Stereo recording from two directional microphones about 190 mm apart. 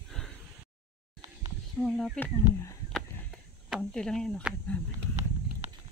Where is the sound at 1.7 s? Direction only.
5° left (ahead or behind).